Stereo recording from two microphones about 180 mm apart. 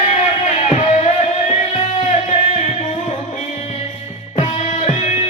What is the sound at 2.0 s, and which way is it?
Music, 45° left (ahead or behind).